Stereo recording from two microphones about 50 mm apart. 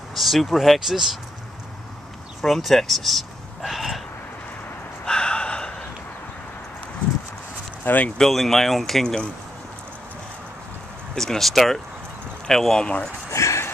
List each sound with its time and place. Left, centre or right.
0.1 s speech: centre
2.4 s speech: centre
5.0 s gasp: centre
7.8 s speech: left
8.2 s speech: centre
11.1 s speech: centre
12.8 s speech: left
13.3 s a sound: left